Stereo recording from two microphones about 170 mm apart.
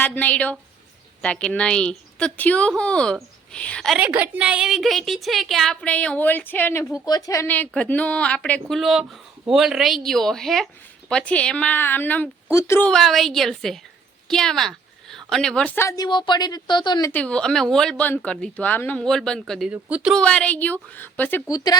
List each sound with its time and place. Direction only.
0.0 s a woman's voice: 10° left (ahead or behind)
4.0 s a woman's voice: 10° right (ahead or behind); by 12.9 s 15° left (ahead or behind)
12.9 s a woman's voice: centre (ahead or behind); by 17.1 s 25° left (ahead or behind)
17.1 s a woman's voice: 5° left (ahead or behind)
20.1 s a woman's voice: 5° left (ahead or behind)
21.5 s speech: 20° left (ahead or behind)